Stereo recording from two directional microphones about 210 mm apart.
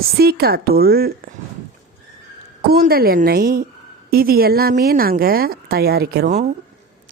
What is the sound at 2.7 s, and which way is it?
Speech, 45° right (ahead or behind).